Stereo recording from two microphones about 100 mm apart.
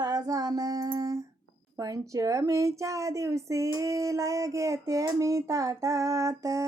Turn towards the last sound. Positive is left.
turn(degrees=-35)  # may be behind; listen again after turning